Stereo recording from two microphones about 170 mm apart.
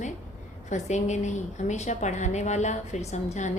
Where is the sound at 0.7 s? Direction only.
45° left (ahead or behind).